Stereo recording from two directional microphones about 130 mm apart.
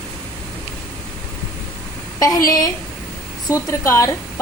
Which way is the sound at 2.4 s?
25° left (ahead or behind).